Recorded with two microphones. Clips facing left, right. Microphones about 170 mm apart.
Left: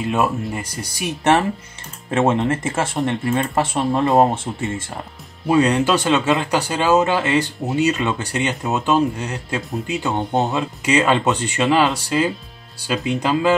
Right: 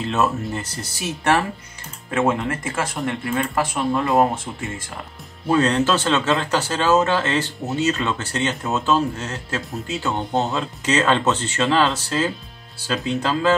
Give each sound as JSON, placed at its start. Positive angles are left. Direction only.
{"t": 0.0, "sound": "speech", "side_deg": 10}
{"t": 5.5, "sound": "speech", "side_deg": 10}